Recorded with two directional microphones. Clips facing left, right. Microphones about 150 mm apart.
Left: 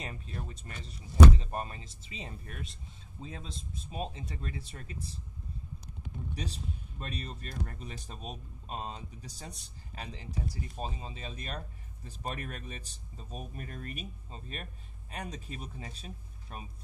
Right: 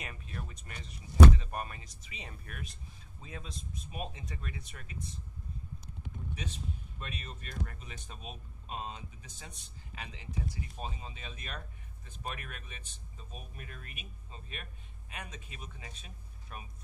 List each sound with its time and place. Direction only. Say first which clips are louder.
0.0 s speech: left 3 dB; 30° left (ahead or behind)
6.3 s speech: left 1 dB; 35° left (ahead or behind)